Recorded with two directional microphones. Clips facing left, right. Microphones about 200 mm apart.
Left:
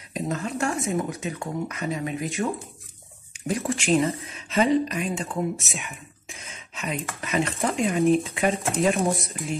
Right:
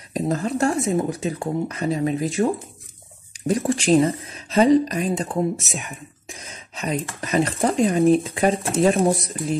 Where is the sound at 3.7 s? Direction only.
35° right (ahead or behind).